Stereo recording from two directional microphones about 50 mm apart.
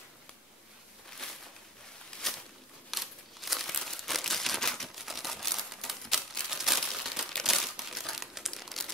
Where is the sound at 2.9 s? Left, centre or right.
Centre.